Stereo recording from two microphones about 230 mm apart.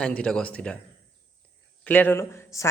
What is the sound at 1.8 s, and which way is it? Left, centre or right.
Speech, centre.